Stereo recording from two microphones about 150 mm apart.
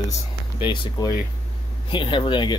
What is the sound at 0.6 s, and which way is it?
Speech, 30° left (ahead or behind).